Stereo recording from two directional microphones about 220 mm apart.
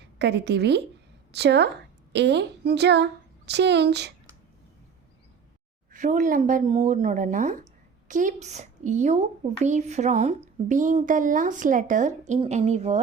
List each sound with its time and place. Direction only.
0.2 s speech: 50° right (ahead or behind)
5.9 s speech: 35° right (ahead or behind)